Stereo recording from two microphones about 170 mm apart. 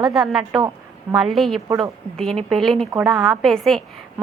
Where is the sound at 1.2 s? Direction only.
Centre (ahead or behind).